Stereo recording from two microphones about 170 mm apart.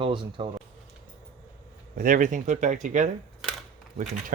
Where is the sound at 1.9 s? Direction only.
55° right (ahead or behind).